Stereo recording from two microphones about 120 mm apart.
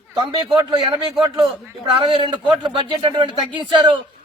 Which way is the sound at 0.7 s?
45° right (ahead or behind).